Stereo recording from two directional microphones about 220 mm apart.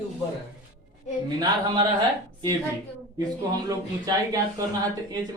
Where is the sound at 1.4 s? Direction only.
15° right (ahead or behind).